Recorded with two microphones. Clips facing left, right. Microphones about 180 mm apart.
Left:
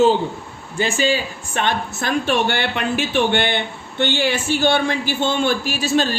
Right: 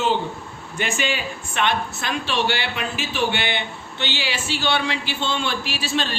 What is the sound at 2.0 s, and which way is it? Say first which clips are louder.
Speech: left 5 dB; 50° left (ahead or behind).